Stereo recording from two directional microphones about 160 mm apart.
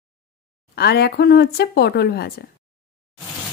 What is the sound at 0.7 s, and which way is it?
Speech, 90° left.